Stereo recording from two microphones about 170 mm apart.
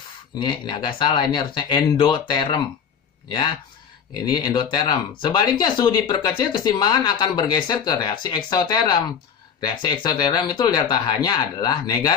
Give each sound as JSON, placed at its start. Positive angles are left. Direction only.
{"t": 0.4, "sound": "speech", "side_deg": 25}